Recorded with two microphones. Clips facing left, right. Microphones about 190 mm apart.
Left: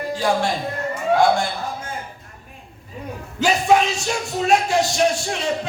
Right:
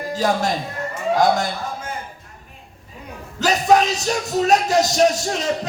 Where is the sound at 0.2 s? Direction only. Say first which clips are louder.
Even; 40° right (ahead or behind).